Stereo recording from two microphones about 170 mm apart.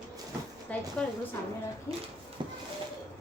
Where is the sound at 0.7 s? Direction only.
10° left (ahead or behind).